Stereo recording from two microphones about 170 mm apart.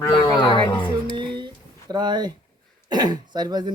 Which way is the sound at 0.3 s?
30° left (ahead or behind).